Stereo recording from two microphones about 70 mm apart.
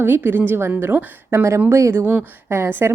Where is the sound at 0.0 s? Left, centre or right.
Right.